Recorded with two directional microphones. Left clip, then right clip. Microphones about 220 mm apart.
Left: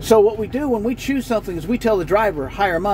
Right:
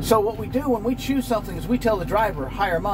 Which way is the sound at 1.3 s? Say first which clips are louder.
Left 3 dB; 55° left (ahead or behind).